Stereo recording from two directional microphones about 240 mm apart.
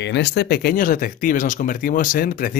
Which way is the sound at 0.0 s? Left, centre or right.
Left.